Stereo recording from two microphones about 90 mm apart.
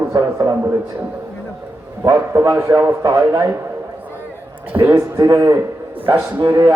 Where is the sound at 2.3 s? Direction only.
30° right (ahead or behind).